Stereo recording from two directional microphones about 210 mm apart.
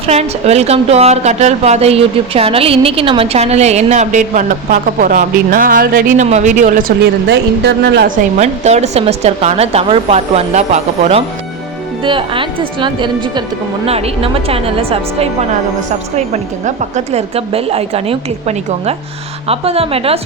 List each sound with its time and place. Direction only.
0.0 s a woman's voice: 30° right (ahead or behind)
7.3 s a woman's voice: 55° right (ahead or behind); by 20.1 s 30° right (ahead or behind)